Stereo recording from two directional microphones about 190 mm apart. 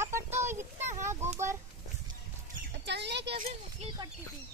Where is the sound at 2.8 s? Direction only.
65° right (ahead or behind).